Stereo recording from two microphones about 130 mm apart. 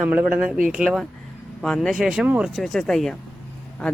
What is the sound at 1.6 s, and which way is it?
Speech, 5° left (ahead or behind).